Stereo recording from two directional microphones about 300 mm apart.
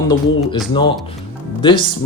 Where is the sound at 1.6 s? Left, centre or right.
Centre.